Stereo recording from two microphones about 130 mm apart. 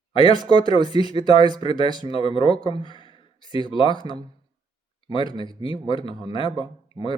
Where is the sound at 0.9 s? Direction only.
50° left (ahead or behind).